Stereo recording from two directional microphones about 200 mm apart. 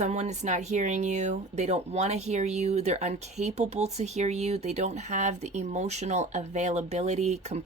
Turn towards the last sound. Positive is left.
turn(degrees=-35)  # may be behind; listen again after turning